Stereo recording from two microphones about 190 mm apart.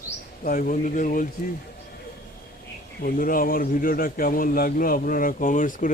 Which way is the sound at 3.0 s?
50° left (ahead or behind).